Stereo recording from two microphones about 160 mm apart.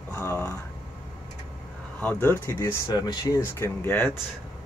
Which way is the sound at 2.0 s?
10° left (ahead or behind).